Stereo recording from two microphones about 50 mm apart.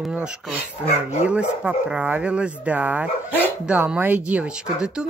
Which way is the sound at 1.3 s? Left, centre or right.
Right.